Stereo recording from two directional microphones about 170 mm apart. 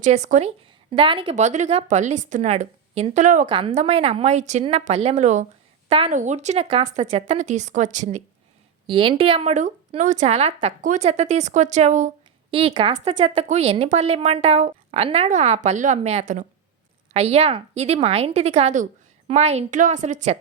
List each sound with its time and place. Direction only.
0.0 s a woman's voice: 45° right (ahead or behind)
0.9 s a woman's voice: 30° right (ahead or behind)
3.4 s a woman's voice: 30° right (ahead or behind)
8.9 s a woman's voice: 30° right (ahead or behind)
12.5 s a woman's voice: 35° right (ahead or behind)